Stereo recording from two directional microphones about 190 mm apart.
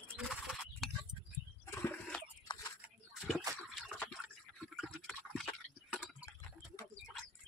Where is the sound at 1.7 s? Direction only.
15° left (ahead or behind).